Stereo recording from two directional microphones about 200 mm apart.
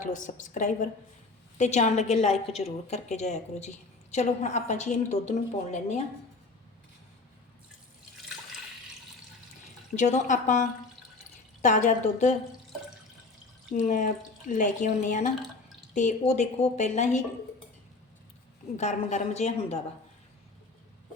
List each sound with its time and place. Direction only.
0.0 s a woman's voice: 40° left (ahead or behind)
9.9 s a woman's voice: 35° left (ahead or behind)
13.7 s a woman's voice: 40° left (ahead or behind)
18.8 s a woman's voice: 35° left (ahead or behind)